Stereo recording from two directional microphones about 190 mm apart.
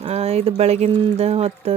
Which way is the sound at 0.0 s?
35° right (ahead or behind).